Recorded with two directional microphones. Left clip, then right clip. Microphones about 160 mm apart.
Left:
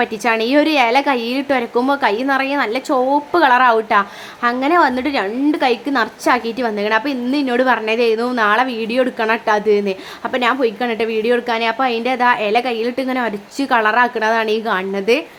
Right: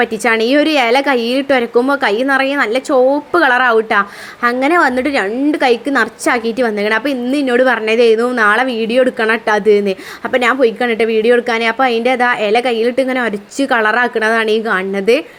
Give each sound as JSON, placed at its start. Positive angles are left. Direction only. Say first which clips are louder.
{"t": 0.0, "sound": "a woman's voice", "louder": "right 4 dB", "side_deg": -20}